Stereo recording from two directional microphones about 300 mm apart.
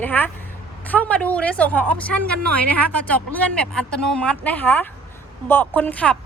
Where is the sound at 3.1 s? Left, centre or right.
Centre.